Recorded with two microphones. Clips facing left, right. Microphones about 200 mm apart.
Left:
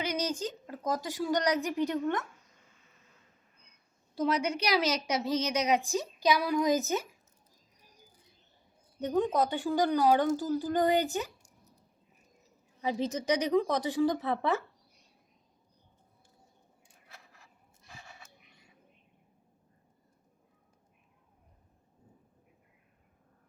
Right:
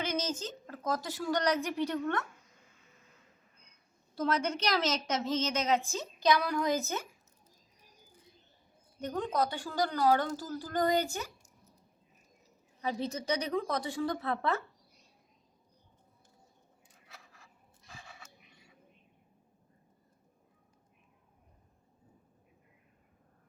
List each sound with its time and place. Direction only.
0.0 s a woman's voice: 15° left (ahead or behind)
4.2 s a woman's voice: 15° left (ahead or behind)
9.0 s a woman's voice: 15° left (ahead or behind)
12.8 s a woman's voice: 15° left (ahead or behind)